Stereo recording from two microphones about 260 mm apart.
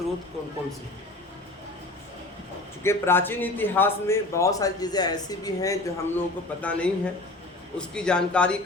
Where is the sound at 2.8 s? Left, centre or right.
Centre.